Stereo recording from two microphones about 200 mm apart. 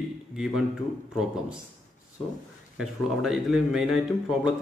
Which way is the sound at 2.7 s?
Centre (ahead or behind).